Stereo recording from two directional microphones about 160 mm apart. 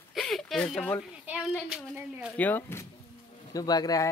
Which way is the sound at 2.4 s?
10° left (ahead or behind).